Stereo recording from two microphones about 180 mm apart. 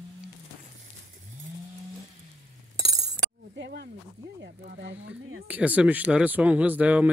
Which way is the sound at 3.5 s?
65° right (ahead or behind).